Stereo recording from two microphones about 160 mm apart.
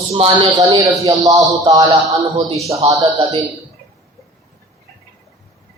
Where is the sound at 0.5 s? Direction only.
20° right (ahead or behind).